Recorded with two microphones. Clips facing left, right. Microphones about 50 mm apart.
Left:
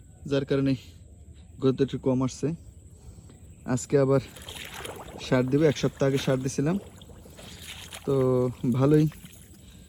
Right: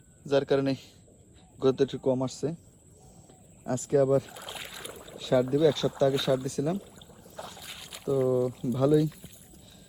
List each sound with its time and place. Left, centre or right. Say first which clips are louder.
0.3 s a man's voice: even; centre
2.0 s speech: left 2 dB; left
3.7 s speech: left 1 dB; left
4.7 s rowboat: left 4 dB; left
5.1 s speech: left 1 dB; left
7.1 s boat: left 2 dB; centre
8.0 s speech: left 2 dB; left
8.5 s speech: left 2 dB; left